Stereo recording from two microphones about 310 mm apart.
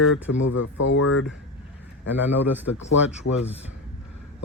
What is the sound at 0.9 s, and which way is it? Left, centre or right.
Speech, left.